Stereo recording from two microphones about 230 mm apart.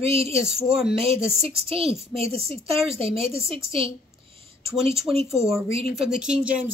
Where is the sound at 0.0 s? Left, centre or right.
Right.